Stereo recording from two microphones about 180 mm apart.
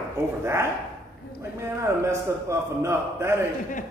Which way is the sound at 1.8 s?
15° right (ahead or behind).